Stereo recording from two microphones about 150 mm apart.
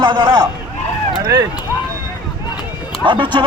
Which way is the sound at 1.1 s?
25° right (ahead or behind).